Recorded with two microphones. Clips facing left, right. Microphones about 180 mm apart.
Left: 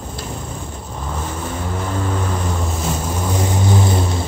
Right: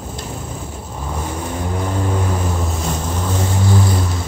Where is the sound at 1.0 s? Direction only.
10° right (ahead or behind).